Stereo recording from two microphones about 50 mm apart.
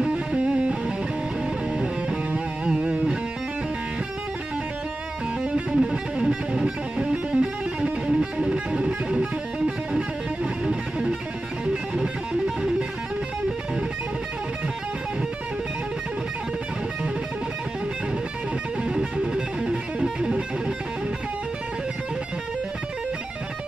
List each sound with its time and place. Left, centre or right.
0.0 s music: right
1.8 s music: centre
5.5 s music: centre
8.1 s music: centre
18.9 s music: centre